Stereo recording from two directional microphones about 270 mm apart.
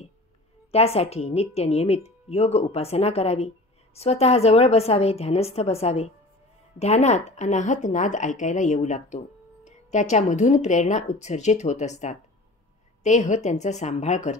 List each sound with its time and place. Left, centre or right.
0.7 s a woman's voice: left